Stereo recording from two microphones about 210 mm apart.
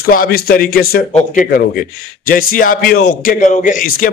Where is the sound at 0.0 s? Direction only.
45° left (ahead or behind).